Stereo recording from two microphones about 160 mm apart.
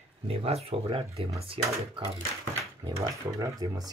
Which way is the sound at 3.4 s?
25° right (ahead or behind).